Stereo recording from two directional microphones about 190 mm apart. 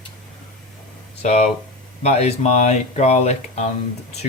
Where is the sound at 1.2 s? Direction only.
35° left (ahead or behind).